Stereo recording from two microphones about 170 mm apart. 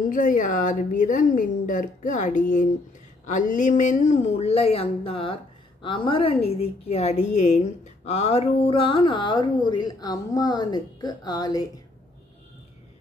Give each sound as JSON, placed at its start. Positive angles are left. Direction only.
{"t": 0.1, "sound": "a woman's voice", "side_deg": 50}